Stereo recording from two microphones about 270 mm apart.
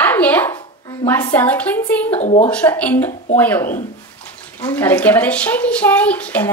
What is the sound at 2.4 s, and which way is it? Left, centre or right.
A child's voice, centre.